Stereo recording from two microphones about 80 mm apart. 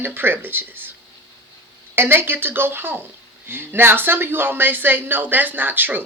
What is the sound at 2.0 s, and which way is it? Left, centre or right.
Speech, right.